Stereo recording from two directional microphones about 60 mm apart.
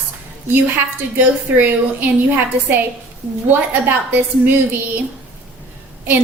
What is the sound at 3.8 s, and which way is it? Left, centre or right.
Speech, right.